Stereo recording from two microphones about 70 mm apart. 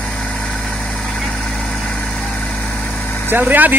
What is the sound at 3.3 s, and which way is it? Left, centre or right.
Speech, right.